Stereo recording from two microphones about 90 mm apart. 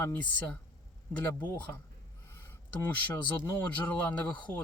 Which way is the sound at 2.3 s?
25° left (ahead or behind).